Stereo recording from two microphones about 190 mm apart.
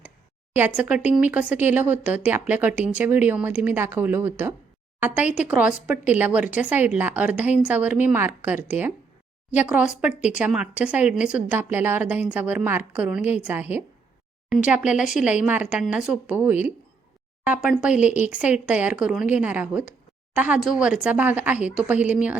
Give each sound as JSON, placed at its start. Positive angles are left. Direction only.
{"t": 0.5, "sound": "speech", "side_deg": -10}